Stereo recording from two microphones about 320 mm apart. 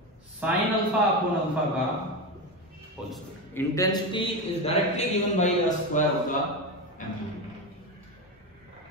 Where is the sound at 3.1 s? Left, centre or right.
Centre.